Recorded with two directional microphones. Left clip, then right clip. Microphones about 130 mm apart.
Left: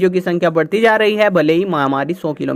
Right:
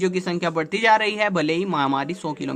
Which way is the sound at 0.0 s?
40° left (ahead or behind).